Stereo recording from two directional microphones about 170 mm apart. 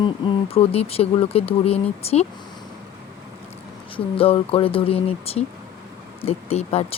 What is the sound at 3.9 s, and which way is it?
Speech, 35° left (ahead or behind).